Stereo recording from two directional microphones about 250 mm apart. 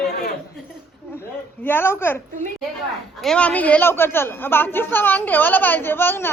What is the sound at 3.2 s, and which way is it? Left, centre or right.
A woman's voice, centre.